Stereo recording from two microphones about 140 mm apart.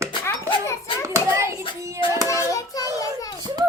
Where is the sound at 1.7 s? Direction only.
20° right (ahead or behind).